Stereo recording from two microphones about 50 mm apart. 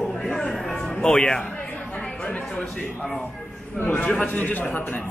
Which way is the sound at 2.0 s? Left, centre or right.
Left.